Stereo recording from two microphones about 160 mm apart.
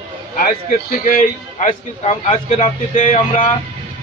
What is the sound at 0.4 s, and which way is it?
A man's voice, 65° left (ahead or behind).